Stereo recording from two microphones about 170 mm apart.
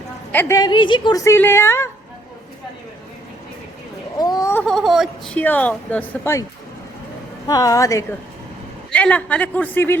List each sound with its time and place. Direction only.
0.3 s speech: 15° left (ahead or behind)
4.2 s a sound: 20° left (ahead or behind)
4.6 s speech: centre (ahead or behind)
7.4 s a woman's voice: 20° left (ahead or behind)
8.9 s speech: 10° left (ahead or behind)